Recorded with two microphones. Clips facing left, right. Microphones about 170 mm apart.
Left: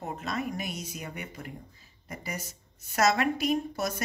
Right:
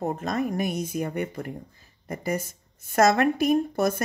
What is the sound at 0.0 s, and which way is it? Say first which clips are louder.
Speech: right 7 dB; 45° right (ahead or behind).